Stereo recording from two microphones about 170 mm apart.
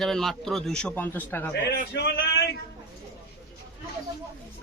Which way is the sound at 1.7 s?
80° left.